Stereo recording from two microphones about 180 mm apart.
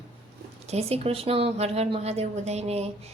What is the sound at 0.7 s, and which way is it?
Speech, 35° right (ahead or behind).